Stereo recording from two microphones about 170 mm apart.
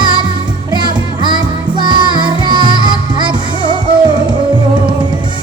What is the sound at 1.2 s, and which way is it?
Music, 25° right (ahead or behind).